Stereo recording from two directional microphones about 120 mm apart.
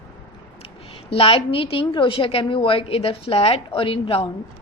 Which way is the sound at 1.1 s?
55° left (ahead or behind).